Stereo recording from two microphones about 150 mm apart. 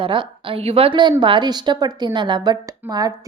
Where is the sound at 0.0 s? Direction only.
35° right (ahead or behind).